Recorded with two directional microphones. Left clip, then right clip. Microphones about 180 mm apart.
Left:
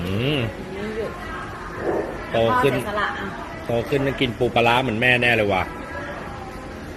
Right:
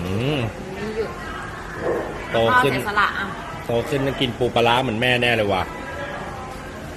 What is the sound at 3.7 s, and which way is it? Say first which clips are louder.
Speech: even; 15° right (ahead or behind).